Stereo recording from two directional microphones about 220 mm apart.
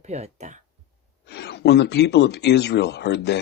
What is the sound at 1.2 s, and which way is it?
Speech, 50° left (ahead or behind).